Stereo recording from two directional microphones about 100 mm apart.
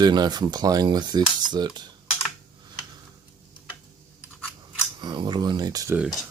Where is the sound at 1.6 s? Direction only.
45° right (ahead or behind).